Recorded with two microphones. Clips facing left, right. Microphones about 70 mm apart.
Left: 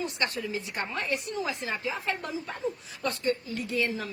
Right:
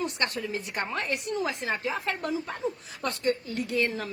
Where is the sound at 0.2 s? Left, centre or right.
Right.